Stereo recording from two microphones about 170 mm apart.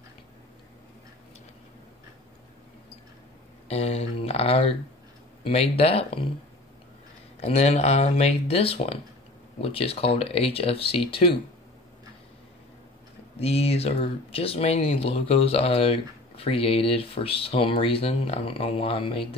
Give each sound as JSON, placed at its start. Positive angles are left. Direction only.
{"t": 3.6, "sound": "a sound", "side_deg": 35}
{"t": 5.4, "sound": "speech", "side_deg": 35}
{"t": 7.3, "sound": "speech", "side_deg": 40}
{"t": 13.4, "sound": "speech", "side_deg": 35}